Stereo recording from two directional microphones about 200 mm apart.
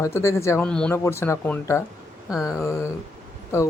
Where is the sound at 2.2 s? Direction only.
5° right (ahead or behind).